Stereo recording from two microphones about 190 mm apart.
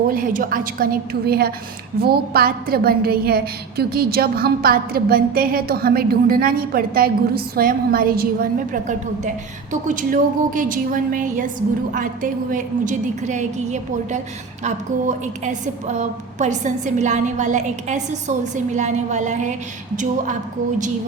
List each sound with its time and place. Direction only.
0.1 s a woman's voice: 45° right (ahead or behind)